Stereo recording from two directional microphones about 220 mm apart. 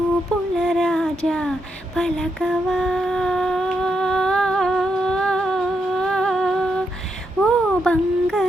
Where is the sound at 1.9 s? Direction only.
Centre (ahead or behind).